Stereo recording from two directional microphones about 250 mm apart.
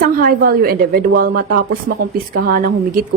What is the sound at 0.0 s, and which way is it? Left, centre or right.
A woman's voice, right.